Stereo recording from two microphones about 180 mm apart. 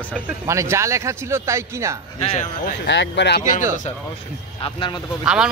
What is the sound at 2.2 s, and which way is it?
Speech, 40° left (ahead or behind).